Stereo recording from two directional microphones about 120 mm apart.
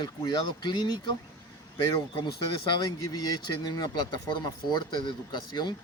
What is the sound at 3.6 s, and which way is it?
Speech, 35° left (ahead or behind).